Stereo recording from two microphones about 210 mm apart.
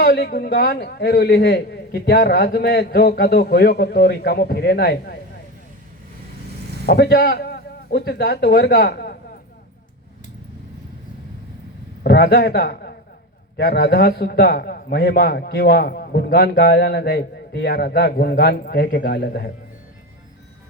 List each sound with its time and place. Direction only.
0.0 s a man's voice: 50° left (ahead or behind)
6.8 s a man's voice: 50° left (ahead or behind)
12.0 s a man's voice: 50° left (ahead or behind)